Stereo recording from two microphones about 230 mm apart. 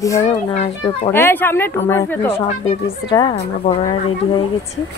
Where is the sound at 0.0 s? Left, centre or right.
Centre.